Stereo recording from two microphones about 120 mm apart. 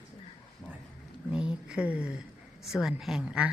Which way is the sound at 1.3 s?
5° right (ahead or behind).